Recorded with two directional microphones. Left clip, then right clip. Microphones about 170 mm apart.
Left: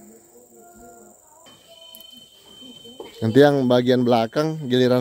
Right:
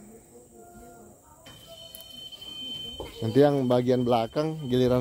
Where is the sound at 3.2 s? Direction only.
40° left (ahead or behind).